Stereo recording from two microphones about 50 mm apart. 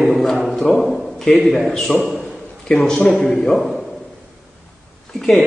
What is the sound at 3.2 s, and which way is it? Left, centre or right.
Speech, centre.